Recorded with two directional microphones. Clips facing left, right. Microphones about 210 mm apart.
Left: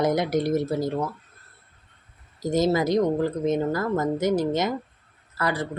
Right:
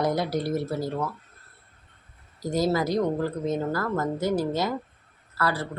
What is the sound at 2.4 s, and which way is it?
Speech, 20° left (ahead or behind).